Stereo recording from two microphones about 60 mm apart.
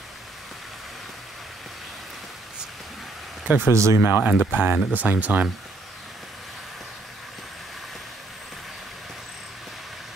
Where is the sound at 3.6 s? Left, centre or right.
Right.